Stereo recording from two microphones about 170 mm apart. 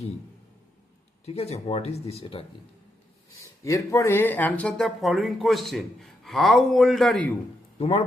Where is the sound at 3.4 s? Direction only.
20° left (ahead or behind).